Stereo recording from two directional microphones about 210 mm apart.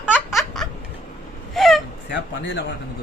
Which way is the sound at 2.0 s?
55° left (ahead or behind).